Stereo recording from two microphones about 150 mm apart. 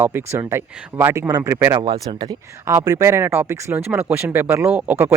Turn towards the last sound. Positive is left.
turn(degrees=-15)  # may be behind; listen again after turning